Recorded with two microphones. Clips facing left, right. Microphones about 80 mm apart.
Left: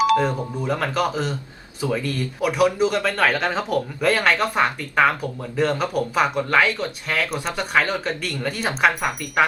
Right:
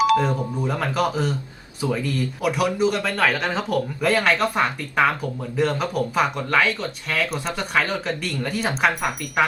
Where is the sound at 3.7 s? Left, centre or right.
Centre.